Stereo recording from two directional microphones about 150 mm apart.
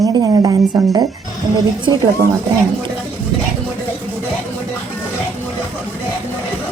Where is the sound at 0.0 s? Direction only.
25° right (ahead or behind).